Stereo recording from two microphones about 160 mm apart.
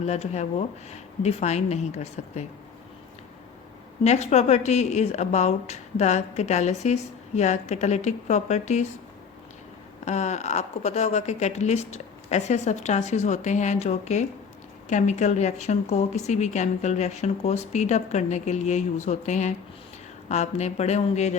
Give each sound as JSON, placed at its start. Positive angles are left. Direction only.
{"t": 0.0, "sound": "a woman's voice", "side_deg": 45}
{"t": 4.0, "sound": "a woman's voice", "side_deg": 45}
{"t": 10.1, "sound": "a woman's voice", "side_deg": 45}